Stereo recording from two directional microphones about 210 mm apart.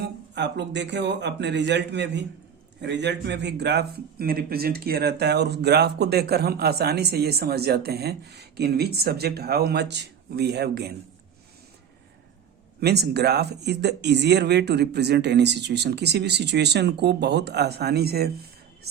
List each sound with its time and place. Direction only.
0.0 s speech: 55° right (ahead or behind)
12.8 s speech: 50° right (ahead or behind)